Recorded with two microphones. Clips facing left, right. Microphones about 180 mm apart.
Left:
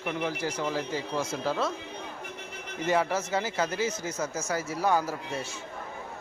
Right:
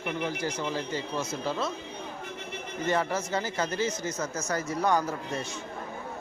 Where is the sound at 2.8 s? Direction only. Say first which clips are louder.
Left 2 dB; 10° left (ahead or behind).